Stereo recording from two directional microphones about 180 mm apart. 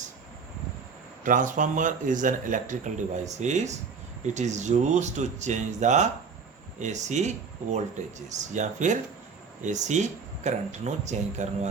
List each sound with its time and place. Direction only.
1.2 s speech: 45° right (ahead or behind)